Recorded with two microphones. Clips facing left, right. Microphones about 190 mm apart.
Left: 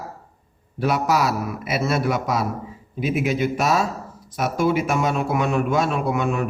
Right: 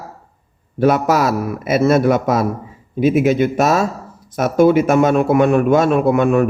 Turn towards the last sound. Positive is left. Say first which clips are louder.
# right 9 dB
turn(degrees=-55)  # may be behind; listen again after turning